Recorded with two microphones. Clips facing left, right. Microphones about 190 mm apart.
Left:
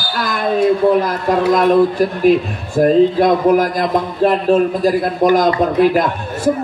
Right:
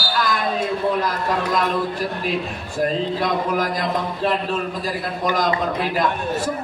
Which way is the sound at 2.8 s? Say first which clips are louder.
Left 11 dB; 50° left (ahead or behind).